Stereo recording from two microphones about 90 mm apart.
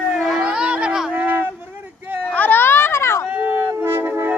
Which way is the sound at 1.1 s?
20° right (ahead or behind).